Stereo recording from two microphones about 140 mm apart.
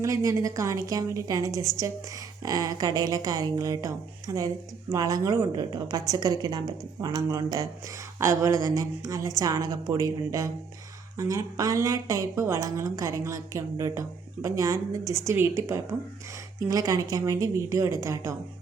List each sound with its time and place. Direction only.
0.0 s speech: 25° right (ahead or behind)